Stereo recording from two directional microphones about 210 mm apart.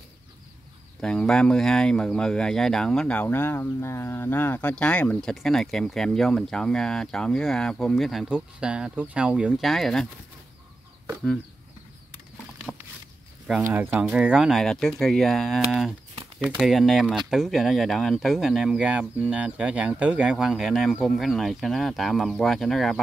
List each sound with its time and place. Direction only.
1.0 s speech: 5° left (ahead or behind)
13.5 s speech: 10° right (ahead or behind)